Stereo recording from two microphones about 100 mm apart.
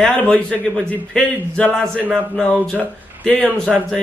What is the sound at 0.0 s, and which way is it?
A man's voice, 5° left (ahead or behind).